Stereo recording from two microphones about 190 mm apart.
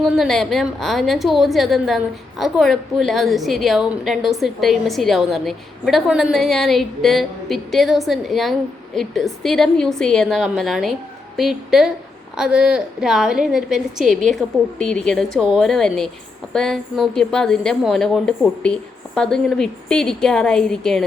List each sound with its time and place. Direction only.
0.0 s a woman's voice: centre (ahead or behind)